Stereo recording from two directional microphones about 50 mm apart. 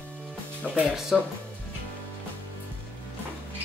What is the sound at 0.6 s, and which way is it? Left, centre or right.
Music, centre.